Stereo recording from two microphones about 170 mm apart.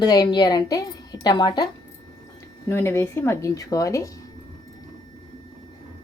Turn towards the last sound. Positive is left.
turn(degrees=20)  # may be behind; listen again after turning